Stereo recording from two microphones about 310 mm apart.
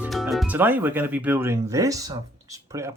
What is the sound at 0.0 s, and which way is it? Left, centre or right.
Speech, centre.